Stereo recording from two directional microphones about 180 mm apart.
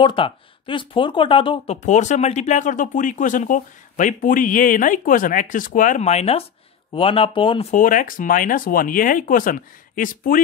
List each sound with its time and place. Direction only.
0.0 s speech: 30° left (ahead or behind)
1.8 s speech: 40° left (ahead or behind)
7.7 s speech: 45° left (ahead or behind)